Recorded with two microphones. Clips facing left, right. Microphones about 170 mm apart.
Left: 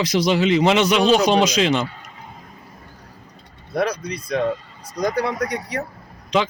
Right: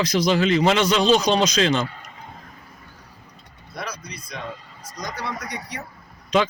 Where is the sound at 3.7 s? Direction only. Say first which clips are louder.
Left 12 dB; 60° left (ahead or behind).